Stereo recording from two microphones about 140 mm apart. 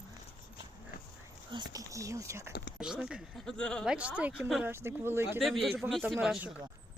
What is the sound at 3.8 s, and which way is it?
Speech, 10° right (ahead or behind).